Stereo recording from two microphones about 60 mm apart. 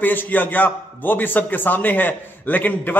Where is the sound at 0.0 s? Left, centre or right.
Left.